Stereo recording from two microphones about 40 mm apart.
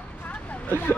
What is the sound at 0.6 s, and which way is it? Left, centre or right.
Speech, left.